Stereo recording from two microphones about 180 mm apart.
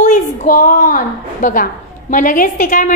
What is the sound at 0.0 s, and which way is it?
A woman's voice, 45° left (ahead or behind).